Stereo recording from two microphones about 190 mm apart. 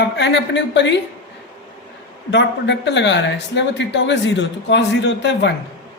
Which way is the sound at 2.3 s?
65° left (ahead or behind).